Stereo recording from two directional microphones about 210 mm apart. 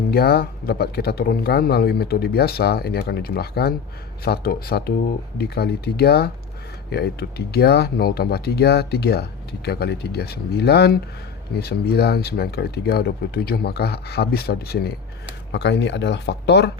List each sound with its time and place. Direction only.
0.1 s speech: 50° left (ahead or behind)